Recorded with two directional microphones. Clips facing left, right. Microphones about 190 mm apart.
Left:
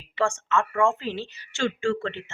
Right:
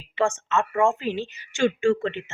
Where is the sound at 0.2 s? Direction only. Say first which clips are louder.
Right 1 dB; 20° right (ahead or behind).